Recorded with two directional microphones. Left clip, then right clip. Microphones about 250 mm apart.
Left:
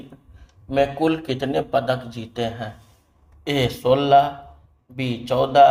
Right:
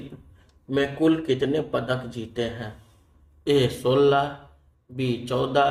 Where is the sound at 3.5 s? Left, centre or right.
Left.